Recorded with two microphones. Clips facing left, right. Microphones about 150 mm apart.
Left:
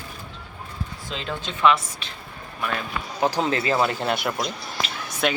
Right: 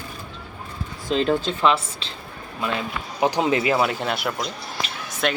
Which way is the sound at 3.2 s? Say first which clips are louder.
Right 3 dB; 15° right (ahead or behind).